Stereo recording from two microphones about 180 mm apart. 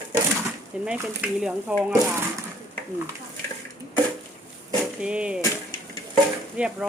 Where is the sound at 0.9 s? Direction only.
5° right (ahead or behind).